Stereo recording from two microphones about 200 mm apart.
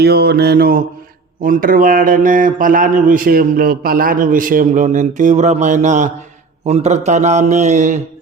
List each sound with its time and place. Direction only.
0.0 s a man's voice: 55° right (ahead or behind); by 7.9 s 35° right (ahead or behind)